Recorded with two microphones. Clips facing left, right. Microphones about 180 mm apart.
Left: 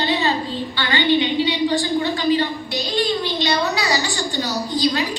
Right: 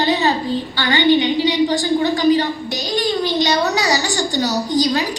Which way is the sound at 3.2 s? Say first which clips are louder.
Right 3 dB; 40° right (ahead or behind).